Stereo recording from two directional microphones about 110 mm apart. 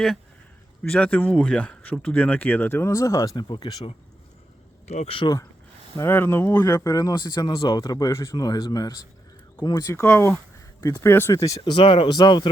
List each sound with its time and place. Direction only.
0.8 s speech: 10° left (ahead or behind); by 3.3 s 30° left (ahead or behind)
3.3 s speech: 45° left (ahead or behind)
4.9 s speech: 85° left
6.0 s speech: 20° left (ahead or behind)
6.7 s speech: 30° left (ahead or behind)
11.1 s speech: 20° left (ahead or behind)
11.3 s speech: 30° left (ahead or behind)
11.6 s speech: 50° left (ahead or behind)